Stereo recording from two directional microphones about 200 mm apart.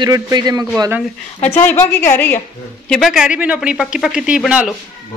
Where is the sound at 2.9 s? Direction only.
Centre (ahead or behind).